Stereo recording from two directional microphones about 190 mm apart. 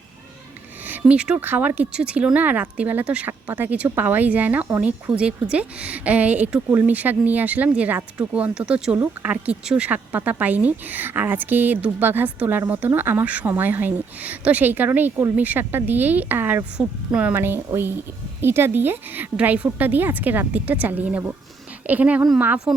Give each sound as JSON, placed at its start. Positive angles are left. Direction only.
{"t": 0.9, "sound": "speech", "side_deg": -10}